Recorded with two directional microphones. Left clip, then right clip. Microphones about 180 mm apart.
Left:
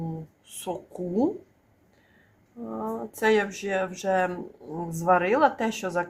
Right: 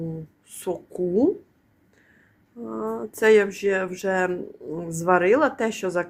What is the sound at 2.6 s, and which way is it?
Speech, 25° right (ahead or behind).